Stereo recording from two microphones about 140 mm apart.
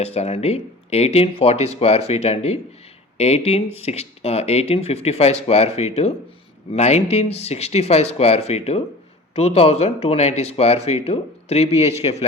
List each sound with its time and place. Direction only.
0.0 s speech: 50° left (ahead or behind)